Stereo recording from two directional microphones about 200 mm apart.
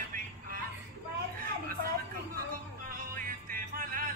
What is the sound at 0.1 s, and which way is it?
Music, 45° right (ahead or behind).